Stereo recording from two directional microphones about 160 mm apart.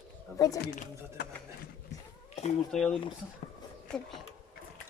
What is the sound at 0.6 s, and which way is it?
Speech, 75° left (ahead or behind).